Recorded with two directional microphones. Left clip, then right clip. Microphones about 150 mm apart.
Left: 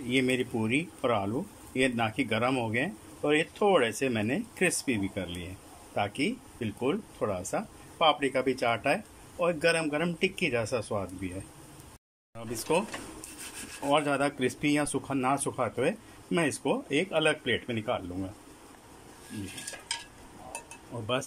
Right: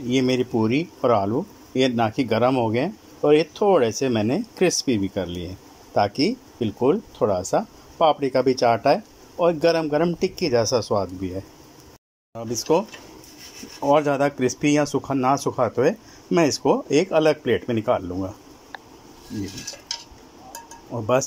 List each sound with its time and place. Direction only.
0.1 s speech: 20° right (ahead or behind)
12.4 s speech: 20° right (ahead or behind)
13.8 s speech: 20° right (ahead or behind)